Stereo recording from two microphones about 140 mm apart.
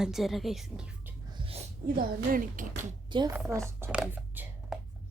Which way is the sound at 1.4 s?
45° right (ahead or behind).